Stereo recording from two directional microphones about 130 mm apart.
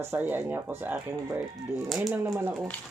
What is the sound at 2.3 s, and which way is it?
Speech, 20° right (ahead or behind).